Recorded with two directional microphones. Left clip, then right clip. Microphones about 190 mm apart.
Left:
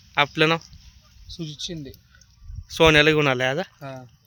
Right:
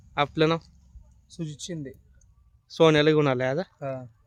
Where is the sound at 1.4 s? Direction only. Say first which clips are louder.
Left 3 dB; 15° right (ahead or behind).